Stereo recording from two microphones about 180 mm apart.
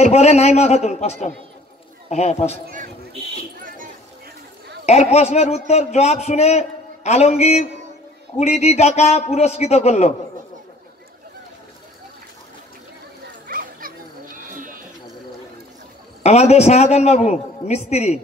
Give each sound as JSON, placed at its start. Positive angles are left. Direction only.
{"t": 0.0, "sound": "a man's voice", "side_deg": 35}
{"t": 3.6, "sound": "a sound", "side_deg": -50}
{"t": 4.8, "sound": "a man's voice", "side_deg": 35}
{"t": 13.5, "sound": "children playing", "side_deg": -55}
{"t": 14.3, "sound": "sheep", "side_deg": -50}
{"t": 16.2, "sound": "a man's voice", "side_deg": 35}